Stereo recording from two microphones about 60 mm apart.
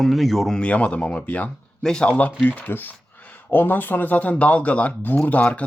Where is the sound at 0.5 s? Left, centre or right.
Centre.